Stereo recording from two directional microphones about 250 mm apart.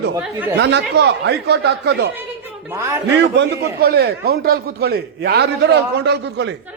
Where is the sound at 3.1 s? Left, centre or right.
Right.